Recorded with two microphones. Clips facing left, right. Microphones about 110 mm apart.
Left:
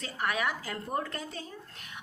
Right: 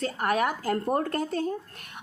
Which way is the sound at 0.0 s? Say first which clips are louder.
Right 6 dB; 45° right (ahead or behind).